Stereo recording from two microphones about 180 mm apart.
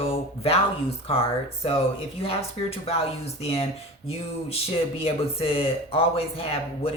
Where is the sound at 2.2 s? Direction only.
35° left (ahead or behind).